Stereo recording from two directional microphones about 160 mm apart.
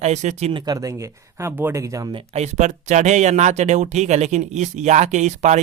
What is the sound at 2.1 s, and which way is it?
Speech, 40° right (ahead or behind).